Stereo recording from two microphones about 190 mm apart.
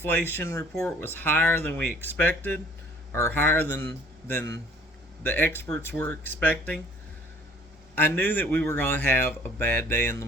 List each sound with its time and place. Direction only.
0.0 s a man's voice: 10° left (ahead or behind)
7.9 s a man's voice: 10° left (ahead or behind)